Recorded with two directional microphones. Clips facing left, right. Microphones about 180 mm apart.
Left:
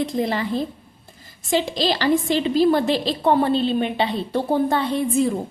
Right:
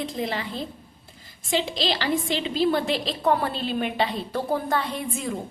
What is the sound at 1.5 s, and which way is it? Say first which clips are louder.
A woman's voice: left 4 dB; 40° left (ahead or behind).